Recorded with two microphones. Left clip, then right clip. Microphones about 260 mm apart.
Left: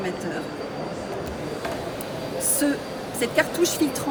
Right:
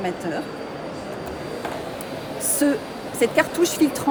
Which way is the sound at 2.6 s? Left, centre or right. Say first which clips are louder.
Right 6 dB; right.